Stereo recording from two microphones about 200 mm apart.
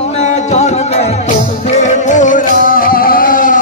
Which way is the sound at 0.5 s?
35° left (ahead or behind).